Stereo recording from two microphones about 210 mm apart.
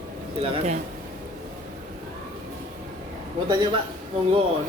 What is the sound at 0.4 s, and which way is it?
Speech, 30° right (ahead or behind).